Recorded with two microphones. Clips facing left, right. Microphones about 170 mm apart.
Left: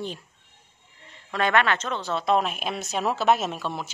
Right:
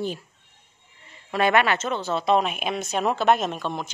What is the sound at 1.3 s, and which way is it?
A woman's voice, 10° right (ahead or behind).